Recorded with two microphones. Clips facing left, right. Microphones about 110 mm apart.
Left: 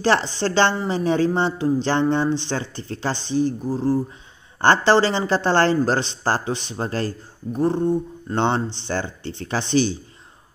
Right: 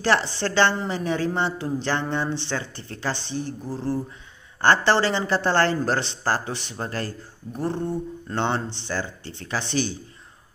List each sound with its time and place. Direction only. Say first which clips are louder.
0.5 s speech: left 2 dB; 20° left (ahead or behind)